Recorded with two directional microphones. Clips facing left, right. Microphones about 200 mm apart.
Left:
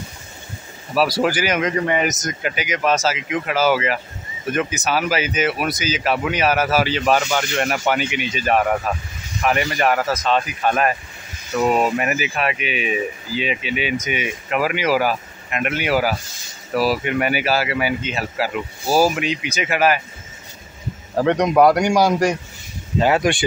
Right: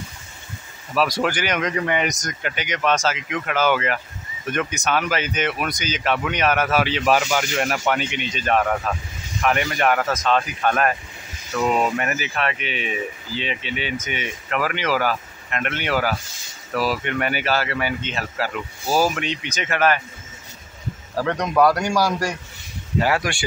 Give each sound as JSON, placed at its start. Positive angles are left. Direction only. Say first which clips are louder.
{"t": 0.9, "sound": "speech", "louder": "left 3 dB", "side_deg": 5}
{"t": 21.1, "sound": "a man's voice", "louder": "left 6 dB", "side_deg": 20}